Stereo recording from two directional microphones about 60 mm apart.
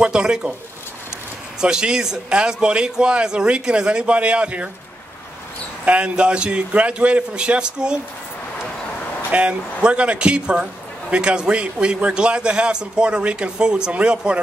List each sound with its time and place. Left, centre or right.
0.0 s a man's voice: centre
1.6 s a man's voice: centre
5.9 s a man's voice: right
9.3 s a man's voice: right